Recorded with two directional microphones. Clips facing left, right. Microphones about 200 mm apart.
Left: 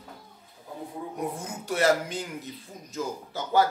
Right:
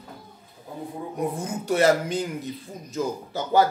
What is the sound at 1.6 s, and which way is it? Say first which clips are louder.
A man's voice: right 4 dB; 20° right (ahead or behind).